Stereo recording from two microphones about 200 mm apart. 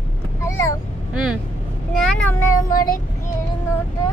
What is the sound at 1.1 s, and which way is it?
Speech, 5° right (ahead or behind).